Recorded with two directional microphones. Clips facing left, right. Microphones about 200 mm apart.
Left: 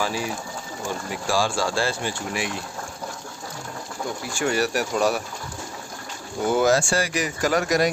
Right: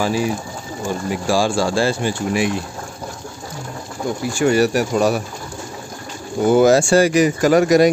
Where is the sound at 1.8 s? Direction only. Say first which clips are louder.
Right 7 dB; 10° right (ahead or behind).